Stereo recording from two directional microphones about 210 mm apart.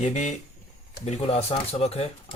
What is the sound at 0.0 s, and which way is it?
Speech, 35° left (ahead or behind).